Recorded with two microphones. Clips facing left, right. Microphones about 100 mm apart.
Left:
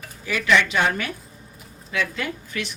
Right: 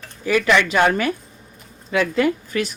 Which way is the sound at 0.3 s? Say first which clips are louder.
Right 4 dB; 40° right (ahead or behind).